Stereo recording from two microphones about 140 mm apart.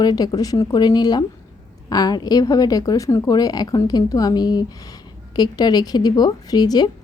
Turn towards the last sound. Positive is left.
turn(degrees=30)  # may be behind; listen again after turning